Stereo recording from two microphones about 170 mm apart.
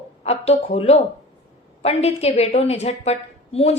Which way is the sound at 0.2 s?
40° left (ahead or behind).